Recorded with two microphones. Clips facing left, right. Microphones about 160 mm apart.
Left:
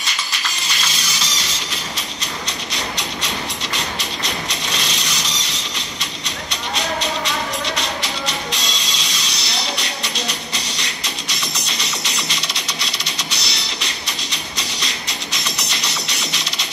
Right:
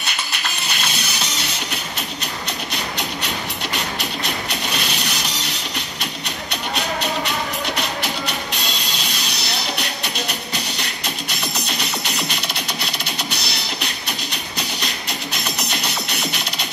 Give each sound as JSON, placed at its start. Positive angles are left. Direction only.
{"t": 0.0, "sound": "music", "side_deg": -60}
{"t": 2.7, "sound": "music", "side_deg": -55}